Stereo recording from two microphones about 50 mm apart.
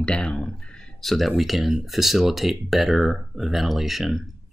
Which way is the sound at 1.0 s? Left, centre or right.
Centre.